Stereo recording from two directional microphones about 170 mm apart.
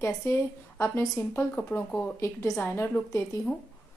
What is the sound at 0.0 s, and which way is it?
Speech, 15° left (ahead or behind).